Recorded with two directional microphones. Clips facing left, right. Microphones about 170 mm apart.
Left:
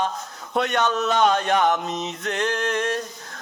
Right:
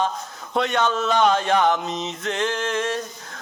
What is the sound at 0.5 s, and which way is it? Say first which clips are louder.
Speech: even; 45° left (ahead or behind).